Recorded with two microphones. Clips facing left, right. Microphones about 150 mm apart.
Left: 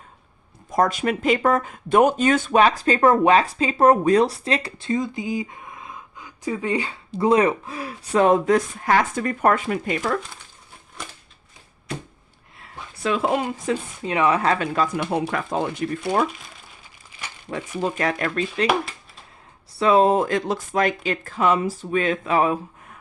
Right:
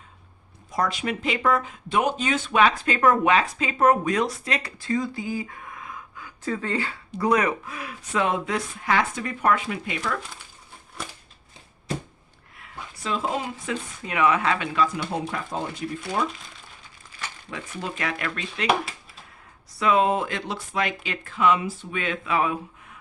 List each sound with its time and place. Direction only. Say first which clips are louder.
0.7 s speech: left 6 dB; 45° left (ahead or behind); by 6.9 s 15° left (ahead or behind)
7.1 s speech: left 5 dB; 25° left (ahead or behind)
13.0 s speech: left 6 dB; 65° left (ahead or behind)
13.7 s speech: left 6 dB; 30° left (ahead or behind)
15.1 s speech: left 5 dB; 70° left (ahead or behind)
17.5 s speech: left 8 dB; 40° left (ahead or behind)
19.7 s speech: left 5 dB; 35° left (ahead or behind)